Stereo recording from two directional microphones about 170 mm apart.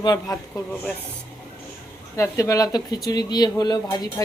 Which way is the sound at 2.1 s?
20° left (ahead or behind).